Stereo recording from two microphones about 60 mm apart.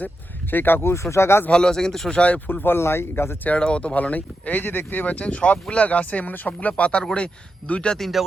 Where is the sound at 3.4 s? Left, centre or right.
Left.